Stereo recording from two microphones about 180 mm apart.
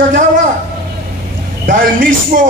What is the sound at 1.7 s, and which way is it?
Speech, 45° right (ahead or behind).